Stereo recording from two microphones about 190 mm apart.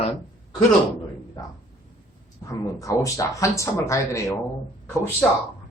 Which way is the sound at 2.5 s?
15° left (ahead or behind).